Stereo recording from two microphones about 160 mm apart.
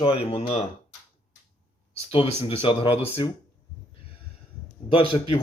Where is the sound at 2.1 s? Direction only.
35° left (ahead or behind).